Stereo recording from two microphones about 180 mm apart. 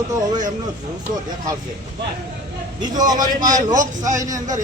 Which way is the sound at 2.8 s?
20° right (ahead or behind).